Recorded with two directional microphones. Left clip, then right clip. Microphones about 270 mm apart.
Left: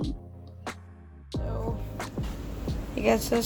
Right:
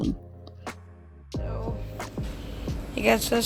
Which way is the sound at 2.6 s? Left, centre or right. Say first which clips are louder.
Right 2 dB; centre.